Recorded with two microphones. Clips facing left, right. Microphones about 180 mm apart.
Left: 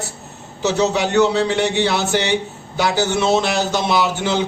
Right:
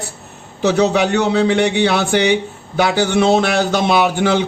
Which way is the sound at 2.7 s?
55° right (ahead or behind).